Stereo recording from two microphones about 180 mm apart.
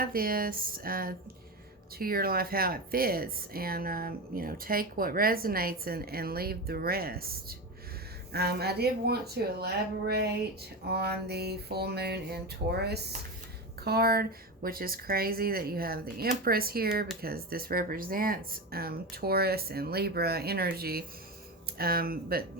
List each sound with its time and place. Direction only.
0.0 s speech: 55° right (ahead or behind)
10.8 s speech: 60° right (ahead or behind)